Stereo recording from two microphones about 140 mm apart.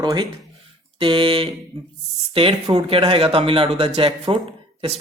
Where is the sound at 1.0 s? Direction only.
40° right (ahead or behind).